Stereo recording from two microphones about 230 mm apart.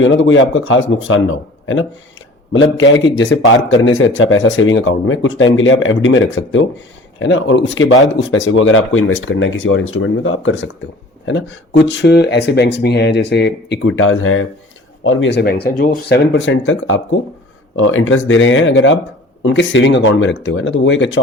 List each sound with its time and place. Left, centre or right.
0.0 s a man's voice: left